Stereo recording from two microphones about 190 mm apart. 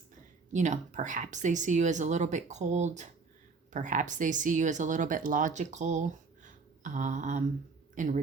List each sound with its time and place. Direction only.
0.5 s speech: 40° right (ahead or behind)